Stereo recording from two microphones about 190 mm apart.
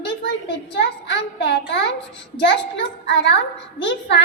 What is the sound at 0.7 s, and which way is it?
A child's voice, 65° left (ahead or behind).